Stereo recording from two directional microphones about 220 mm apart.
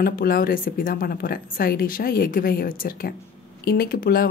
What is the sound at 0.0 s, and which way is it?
A woman's voice, 40° left (ahead or behind).